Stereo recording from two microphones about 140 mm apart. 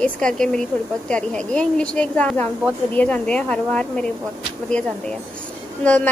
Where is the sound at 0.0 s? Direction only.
5° left (ahead or behind).